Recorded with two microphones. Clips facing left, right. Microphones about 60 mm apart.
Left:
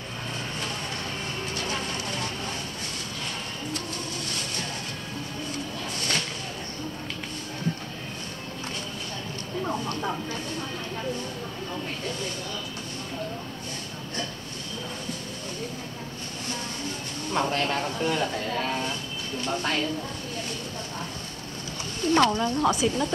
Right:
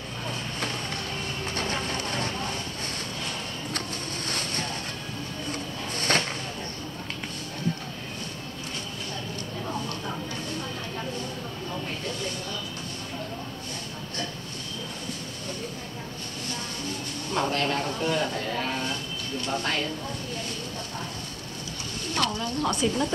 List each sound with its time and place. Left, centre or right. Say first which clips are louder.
1.5 s vehicle: right 3 dB; right
5.9 s a sound: right 5 dB; right
17.3 s a sound: even; centre
19.4 s speech: left 1 dB; centre
22.1 s speech: left 7 dB; left
22.6 s speech: left 1 dB; centre